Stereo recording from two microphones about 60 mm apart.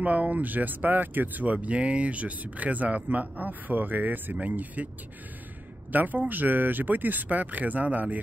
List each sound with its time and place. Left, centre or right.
0.0 s speech: right
5.9 s speech: right